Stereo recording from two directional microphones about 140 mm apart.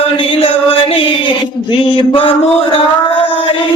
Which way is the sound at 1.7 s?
35° left (ahead or behind).